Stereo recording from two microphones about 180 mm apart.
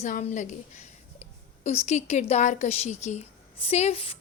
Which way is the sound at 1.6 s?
40° left (ahead or behind).